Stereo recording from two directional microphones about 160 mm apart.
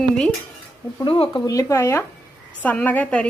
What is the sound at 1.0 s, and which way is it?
A woman's voice, 30° left (ahead or behind).